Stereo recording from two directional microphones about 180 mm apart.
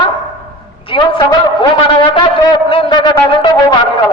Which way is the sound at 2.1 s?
30° left (ahead or behind).